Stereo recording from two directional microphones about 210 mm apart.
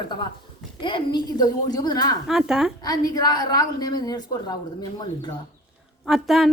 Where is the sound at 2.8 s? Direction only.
20° left (ahead or behind).